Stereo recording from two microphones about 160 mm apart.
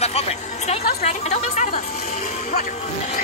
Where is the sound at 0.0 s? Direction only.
40° left (ahead or behind).